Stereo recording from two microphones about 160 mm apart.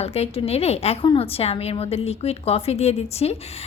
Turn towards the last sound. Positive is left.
turn(degrees=40)  # may be behind; listen again after turning